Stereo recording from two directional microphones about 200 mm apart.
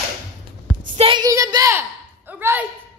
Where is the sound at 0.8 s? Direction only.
30° right (ahead or behind); by 2.6 s 10° right (ahead or behind).